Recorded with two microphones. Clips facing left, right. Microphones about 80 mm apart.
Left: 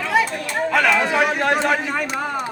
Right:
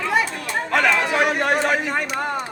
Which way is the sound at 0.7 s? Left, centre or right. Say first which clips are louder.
Left 1 dB; centre.